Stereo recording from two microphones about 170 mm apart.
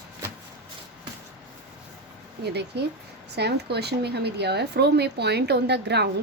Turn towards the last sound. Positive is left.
turn(degrees=-80)